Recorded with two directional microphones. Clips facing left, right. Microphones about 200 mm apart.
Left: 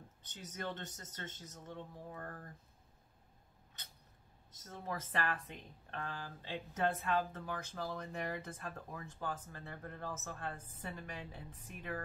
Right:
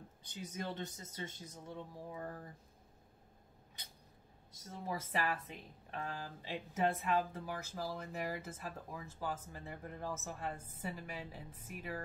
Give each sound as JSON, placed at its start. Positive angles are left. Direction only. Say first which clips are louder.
{"t": 0.2, "sound": "a woman's voice", "louder": "right 1 dB", "side_deg": -10}
{"t": 4.5, "sound": "a woman's voice", "louder": "right 1 dB", "side_deg": -10}